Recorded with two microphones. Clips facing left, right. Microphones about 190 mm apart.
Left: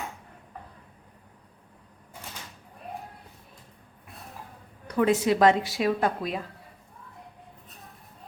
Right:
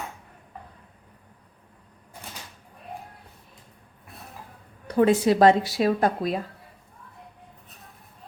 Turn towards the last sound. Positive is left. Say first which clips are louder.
# right 3 dB
turn(degrees=-35)  # may be behind; listen again after turning